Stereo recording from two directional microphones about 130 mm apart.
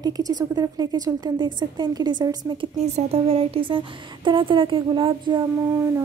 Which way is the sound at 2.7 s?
55° right (ahead or behind).